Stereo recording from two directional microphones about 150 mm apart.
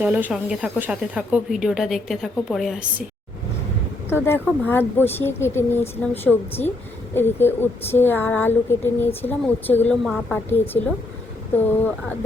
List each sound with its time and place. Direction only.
0.0 s speech: 10° right (ahead or behind)
4.1 s speech: 15° left (ahead or behind)